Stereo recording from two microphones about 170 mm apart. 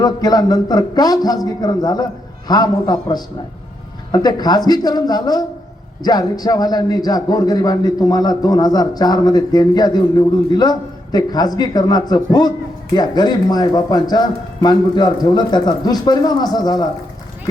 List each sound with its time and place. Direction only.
0.0 s a man's voice: 25° left (ahead or behind)